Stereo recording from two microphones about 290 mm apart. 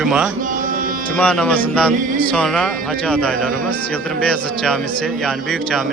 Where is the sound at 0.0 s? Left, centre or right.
Centre.